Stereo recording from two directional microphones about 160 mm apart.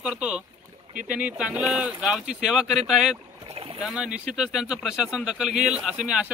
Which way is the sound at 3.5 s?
35° right (ahead or behind).